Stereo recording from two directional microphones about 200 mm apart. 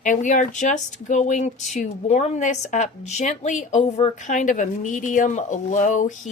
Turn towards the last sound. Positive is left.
turn(degrees=40)  # may be behind; listen again after turning